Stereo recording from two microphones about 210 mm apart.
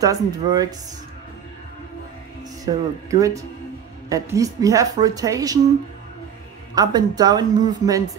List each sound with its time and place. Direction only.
0.0 s speech: 15° right (ahead or behind)
2.6 s speech: 15° right (ahead or behind)
6.7 s a woman's voice: 20° right (ahead or behind)